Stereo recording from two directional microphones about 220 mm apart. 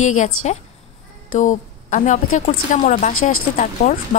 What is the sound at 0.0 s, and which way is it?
Speech, 35° left (ahead or behind).